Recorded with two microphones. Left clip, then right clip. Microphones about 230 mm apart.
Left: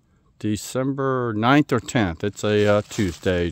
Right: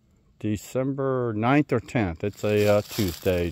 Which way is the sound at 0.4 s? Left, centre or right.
Centre.